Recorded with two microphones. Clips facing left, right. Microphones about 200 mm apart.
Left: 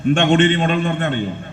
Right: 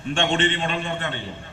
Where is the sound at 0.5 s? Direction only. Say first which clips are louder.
Left 8 dB; 55° left (ahead or behind).